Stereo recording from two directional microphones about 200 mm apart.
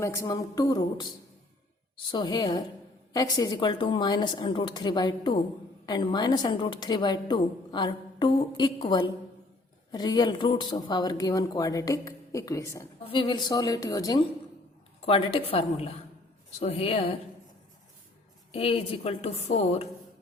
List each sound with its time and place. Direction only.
0.0 s a woman's voice: 15° left (ahead or behind)
18.5 s a woman's voice: 30° left (ahead or behind)